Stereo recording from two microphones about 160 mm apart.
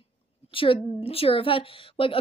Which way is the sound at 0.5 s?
35° left (ahead or behind).